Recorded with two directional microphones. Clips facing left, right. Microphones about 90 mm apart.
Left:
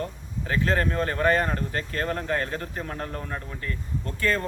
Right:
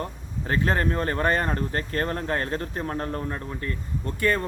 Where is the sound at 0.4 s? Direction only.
35° right (ahead or behind).